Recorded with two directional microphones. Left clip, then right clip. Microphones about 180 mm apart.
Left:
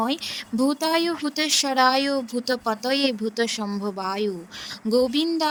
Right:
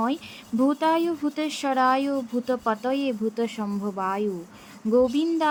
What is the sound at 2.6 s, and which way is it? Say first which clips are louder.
Speech: even; centre (ahead or behind).